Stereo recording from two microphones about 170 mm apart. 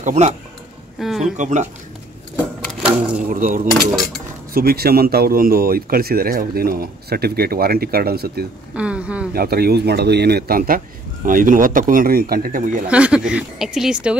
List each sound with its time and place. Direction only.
0.0 s speech: 40° right (ahead or behind)
0.9 s a woman's voice: centre (ahead or behind)
1.3 s speech: 45° right (ahead or behind)
2.8 s speech: 5° right (ahead or behind)
3.3 s speech: 55° right (ahead or behind)
8.7 s a sound: 5° right (ahead or behind)
9.3 s speech: 65° right (ahead or behind)
12.8 s a woman's voice: 5° right (ahead or behind)